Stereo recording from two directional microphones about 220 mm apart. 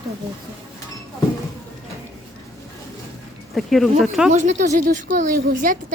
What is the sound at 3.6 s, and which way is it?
Speech, centre (ahead or behind).